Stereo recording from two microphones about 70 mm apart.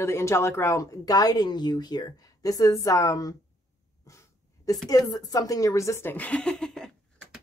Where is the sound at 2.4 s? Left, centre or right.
Left.